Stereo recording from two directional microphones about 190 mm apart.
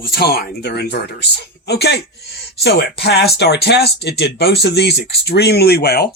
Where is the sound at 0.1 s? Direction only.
55° left (ahead or behind).